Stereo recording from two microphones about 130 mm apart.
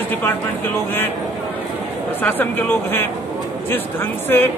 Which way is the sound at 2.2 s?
15° left (ahead or behind).